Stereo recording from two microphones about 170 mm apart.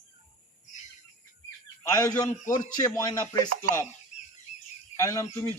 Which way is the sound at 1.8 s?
20° left (ahead or behind).